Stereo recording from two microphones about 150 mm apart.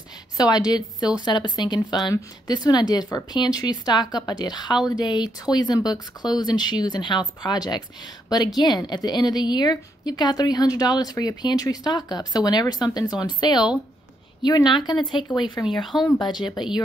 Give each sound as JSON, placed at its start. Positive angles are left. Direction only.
{"t": 0.4, "sound": "a woman's voice", "side_deg": 25}
{"t": 15.6, "sound": "speech", "side_deg": 0}